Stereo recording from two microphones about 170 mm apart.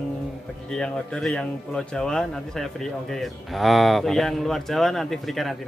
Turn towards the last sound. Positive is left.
turn(degrees=0)  # may be behind; listen again after turning